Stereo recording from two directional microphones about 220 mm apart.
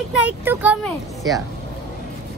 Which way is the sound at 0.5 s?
5° right (ahead or behind).